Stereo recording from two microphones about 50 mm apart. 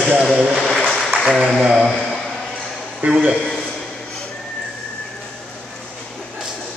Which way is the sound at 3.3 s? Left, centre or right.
Centre.